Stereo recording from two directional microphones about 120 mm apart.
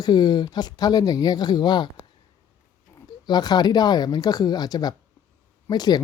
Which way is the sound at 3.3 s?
35° left (ahead or behind).